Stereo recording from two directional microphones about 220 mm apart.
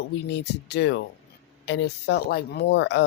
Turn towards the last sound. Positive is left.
turn(degrees=55)  # may be behind; listen again after turning